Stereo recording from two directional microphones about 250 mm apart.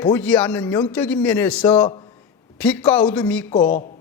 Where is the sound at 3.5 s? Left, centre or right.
Left.